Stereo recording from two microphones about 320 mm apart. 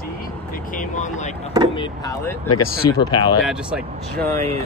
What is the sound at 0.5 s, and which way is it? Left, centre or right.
Speech, left.